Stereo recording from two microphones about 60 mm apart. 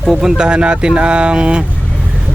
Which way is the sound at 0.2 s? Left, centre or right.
Centre.